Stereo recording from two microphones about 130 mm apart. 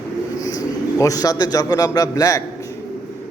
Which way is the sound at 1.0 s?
25° left (ahead or behind).